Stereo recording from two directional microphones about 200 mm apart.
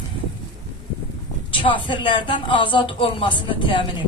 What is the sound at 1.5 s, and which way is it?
Speech, 25° left (ahead or behind).